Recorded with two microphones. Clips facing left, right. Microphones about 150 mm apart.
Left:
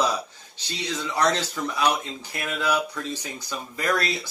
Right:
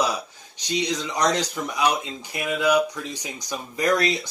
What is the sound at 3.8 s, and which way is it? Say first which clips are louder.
Speech: right 4 dB; 20° right (ahead or behind).